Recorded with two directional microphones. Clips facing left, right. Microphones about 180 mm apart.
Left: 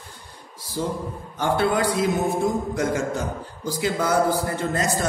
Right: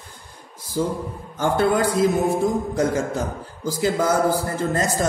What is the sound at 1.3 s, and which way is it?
A man's voice, 45° right (ahead or behind).